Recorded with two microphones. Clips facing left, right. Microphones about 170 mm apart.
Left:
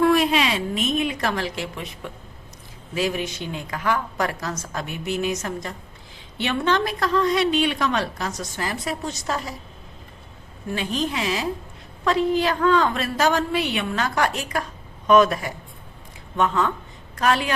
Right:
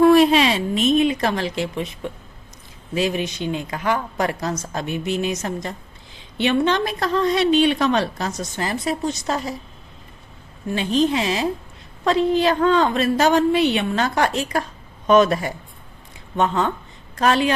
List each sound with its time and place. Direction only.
0.0 s a woman's voice: 30° right (ahead or behind)
2.9 s a woman's voice: 20° right (ahead or behind)
10.7 s a woman's voice: 25° right (ahead or behind)